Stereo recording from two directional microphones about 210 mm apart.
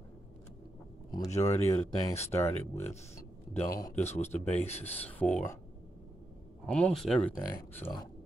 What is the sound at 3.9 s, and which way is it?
Speech, 30° left (ahead or behind).